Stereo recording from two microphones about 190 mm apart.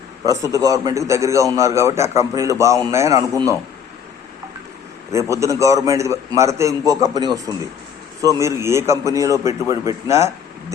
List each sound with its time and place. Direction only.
0.4 s a man's voice: 20° right (ahead or behind)
5.1 s a man's voice: 15° right (ahead or behind)